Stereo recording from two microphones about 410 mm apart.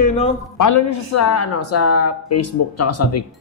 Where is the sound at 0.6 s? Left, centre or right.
Left.